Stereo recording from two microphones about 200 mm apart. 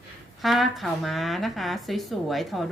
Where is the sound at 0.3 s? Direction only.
Centre (ahead or behind).